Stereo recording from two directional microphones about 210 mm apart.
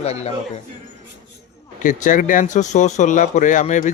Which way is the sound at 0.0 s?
30° left (ahead or behind).